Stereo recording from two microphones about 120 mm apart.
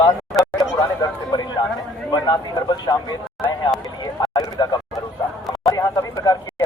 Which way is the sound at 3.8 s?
35° left (ahead or behind).